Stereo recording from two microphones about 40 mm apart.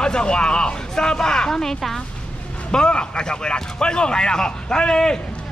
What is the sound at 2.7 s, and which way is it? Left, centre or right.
A man's voice, left.